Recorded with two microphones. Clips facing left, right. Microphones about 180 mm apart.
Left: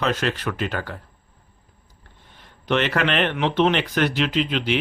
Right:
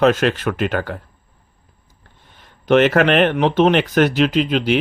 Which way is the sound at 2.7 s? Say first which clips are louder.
Right 8 dB; 50° right (ahead or behind).